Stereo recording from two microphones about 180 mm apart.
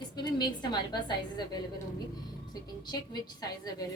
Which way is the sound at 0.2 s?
25° left (ahead or behind).